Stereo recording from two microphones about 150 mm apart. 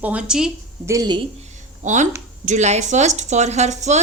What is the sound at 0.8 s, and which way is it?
Speech, 25° right (ahead or behind).